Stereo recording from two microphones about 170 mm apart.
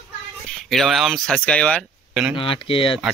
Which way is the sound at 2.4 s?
30° left (ahead or behind).